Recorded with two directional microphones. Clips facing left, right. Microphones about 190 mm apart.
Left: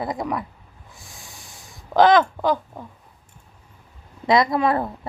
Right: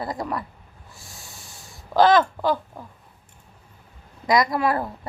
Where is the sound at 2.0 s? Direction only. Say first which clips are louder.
Left 2 dB; 15° left (ahead or behind).